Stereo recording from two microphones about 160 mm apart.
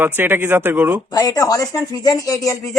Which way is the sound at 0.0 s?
10° right (ahead or behind).